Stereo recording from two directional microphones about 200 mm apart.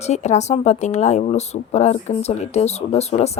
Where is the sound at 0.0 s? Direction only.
35° left (ahead or behind).